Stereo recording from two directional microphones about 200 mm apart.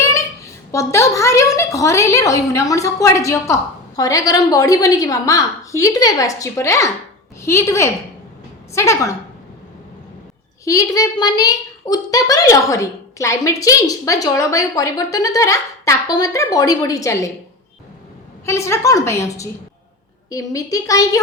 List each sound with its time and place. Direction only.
0.0 s a woman's voice: 15° left (ahead or behind)
10.7 s a woman's voice: 15° left (ahead or behind)
18.4 s a woman's voice: 15° left (ahead or behind)